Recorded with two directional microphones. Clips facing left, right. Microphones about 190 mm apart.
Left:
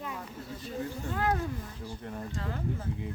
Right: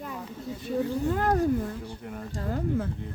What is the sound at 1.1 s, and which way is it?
Speech, 40° right (ahead or behind).